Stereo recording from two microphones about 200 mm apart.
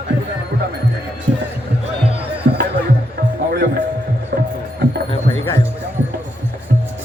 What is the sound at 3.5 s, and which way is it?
Music, 55° right (ahead or behind).